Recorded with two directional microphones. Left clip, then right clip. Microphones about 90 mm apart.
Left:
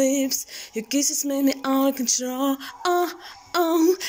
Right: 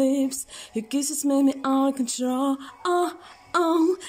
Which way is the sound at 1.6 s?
40° right (ahead or behind).